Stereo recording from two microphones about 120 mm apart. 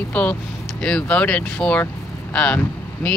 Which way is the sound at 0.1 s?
10° left (ahead or behind).